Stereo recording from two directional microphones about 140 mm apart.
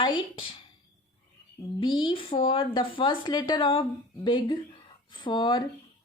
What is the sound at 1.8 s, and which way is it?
Speech, 35° left (ahead or behind).